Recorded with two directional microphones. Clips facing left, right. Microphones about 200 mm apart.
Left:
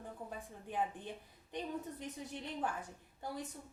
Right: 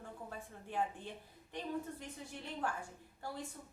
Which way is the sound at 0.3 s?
20° left (ahead or behind).